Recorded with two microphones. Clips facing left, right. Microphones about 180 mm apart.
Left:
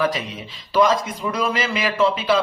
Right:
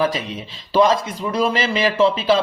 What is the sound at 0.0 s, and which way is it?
A man's voice, 25° right (ahead or behind).